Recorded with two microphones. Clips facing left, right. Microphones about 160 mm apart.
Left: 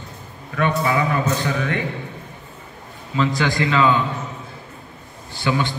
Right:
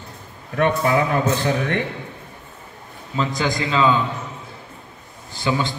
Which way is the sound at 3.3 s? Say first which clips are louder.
Left 1 dB; 20° right (ahead or behind).